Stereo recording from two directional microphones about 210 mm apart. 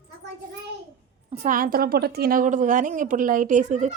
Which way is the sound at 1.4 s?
40° right (ahead or behind).